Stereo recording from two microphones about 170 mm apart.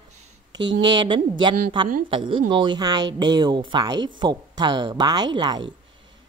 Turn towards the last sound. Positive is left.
turn(degrees=-25)  # may be behind; listen again after turning